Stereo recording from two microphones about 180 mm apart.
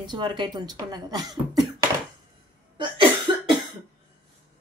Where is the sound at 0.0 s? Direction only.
25° right (ahead or behind).